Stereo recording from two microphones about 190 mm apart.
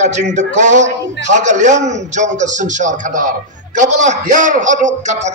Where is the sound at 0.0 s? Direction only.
40° right (ahead or behind).